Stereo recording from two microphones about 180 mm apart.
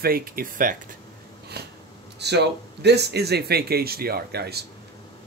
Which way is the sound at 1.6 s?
65° right (ahead or behind).